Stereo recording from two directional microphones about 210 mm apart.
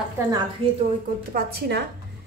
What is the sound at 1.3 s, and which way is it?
Speech, 50° right (ahead or behind).